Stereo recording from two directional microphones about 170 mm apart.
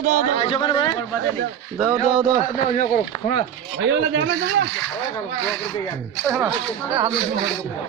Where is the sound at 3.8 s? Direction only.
90° right.